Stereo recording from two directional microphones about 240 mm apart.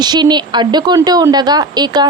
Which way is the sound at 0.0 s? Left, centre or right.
Centre.